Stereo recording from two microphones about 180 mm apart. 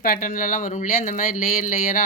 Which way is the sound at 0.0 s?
50° left (ahead or behind).